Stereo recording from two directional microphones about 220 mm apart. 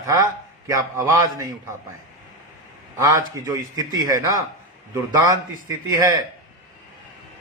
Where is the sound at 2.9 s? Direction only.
15° right (ahead or behind).